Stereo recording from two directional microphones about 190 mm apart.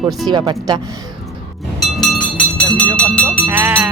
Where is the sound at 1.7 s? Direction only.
Centre (ahead or behind).